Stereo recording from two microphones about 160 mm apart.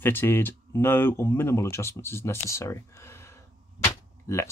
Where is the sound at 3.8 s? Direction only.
15° left (ahead or behind).